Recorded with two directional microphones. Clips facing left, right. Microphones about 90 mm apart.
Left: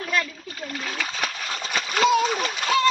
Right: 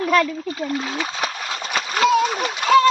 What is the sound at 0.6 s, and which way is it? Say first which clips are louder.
Speech: right 4 dB; 25° right (ahead or behind).